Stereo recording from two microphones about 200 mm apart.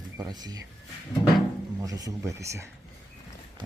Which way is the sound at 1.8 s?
15° right (ahead or behind).